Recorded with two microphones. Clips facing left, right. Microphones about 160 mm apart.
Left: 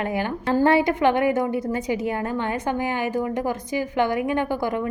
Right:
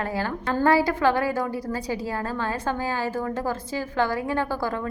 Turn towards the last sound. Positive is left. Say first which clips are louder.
# left 3 dB
turn(degrees=20)  # may be behind; listen again after turning